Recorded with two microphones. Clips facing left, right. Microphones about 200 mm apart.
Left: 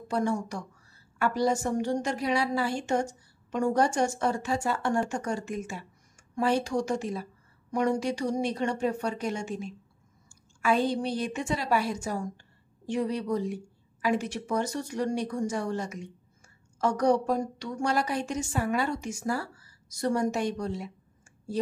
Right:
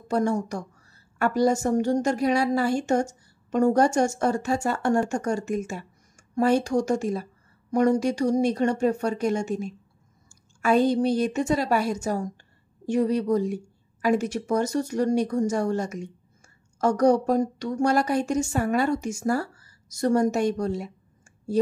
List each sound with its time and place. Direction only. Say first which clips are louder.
0.1 s a woman's voice: right 4 dB; 45° right (ahead or behind)